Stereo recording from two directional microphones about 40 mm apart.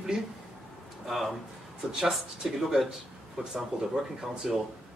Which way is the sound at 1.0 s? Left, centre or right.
Centre.